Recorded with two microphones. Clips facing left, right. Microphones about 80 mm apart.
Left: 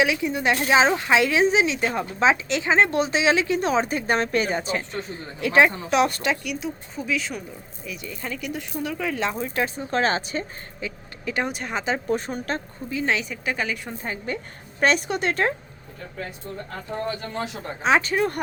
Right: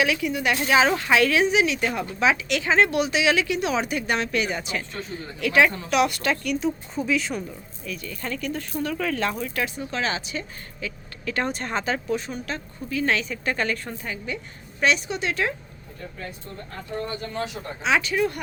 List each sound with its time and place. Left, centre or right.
0.0 s a woman's voice: left
6.2 s speech: centre
7.9 s speech: centre
9.4 s speech: left
10.8 s speech: left
12.0 s speech: left
12.9 s speech: centre
14.0 s speech: left
17.8 s speech: left